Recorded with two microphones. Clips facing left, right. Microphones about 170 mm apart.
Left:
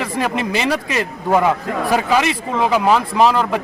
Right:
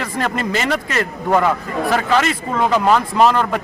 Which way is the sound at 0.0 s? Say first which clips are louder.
Left 1 dB; 10° left (ahead or behind).